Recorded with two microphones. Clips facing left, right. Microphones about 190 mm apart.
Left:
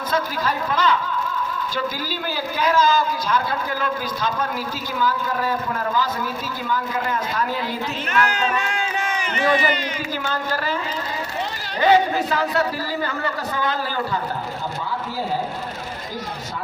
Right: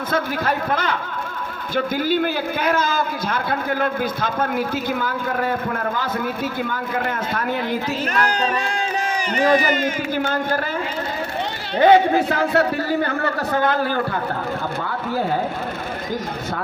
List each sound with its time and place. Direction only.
0.1 s a man's voice: 55° right (ahead or behind)
8.1 s a sound: 35° right (ahead or behind)
9.3 s speech: 35° right (ahead or behind); by 10.6 s 55° right (ahead or behind)
11.8 s a man's voice: 55° right (ahead or behind)